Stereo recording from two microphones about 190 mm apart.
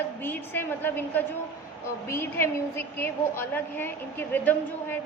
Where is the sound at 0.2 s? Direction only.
10° left (ahead or behind).